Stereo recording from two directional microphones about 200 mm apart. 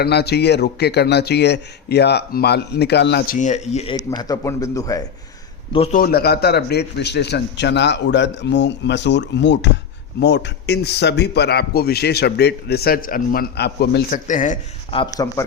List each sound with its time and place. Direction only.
0.0 s a man's voice: 55° left (ahead or behind); by 3.9 s 35° left (ahead or behind)
3.9 s a man's voice: 20° left (ahead or behind)
5.7 s a man's voice: 30° left (ahead or behind)
6.0 s a man's voice: 50° left (ahead or behind)
14.3 s speech: 40° left (ahead or behind)
14.8 s a man's voice: 25° left (ahead or behind)